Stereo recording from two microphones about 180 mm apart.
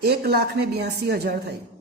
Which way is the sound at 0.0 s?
60° right (ahead or behind).